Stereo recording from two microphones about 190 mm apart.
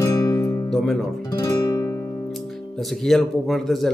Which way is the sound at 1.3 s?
15° left (ahead or behind).